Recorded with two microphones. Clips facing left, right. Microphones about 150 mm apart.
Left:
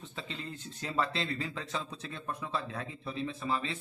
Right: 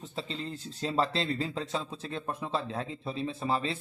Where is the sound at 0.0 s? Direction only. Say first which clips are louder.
Right 5 dB; 35° right (ahead or behind).